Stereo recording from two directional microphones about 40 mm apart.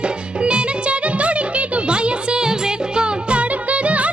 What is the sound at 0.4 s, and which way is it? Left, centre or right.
Music, right.